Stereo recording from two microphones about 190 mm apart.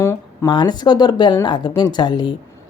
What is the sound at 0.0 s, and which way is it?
Speech, 20° left (ahead or behind).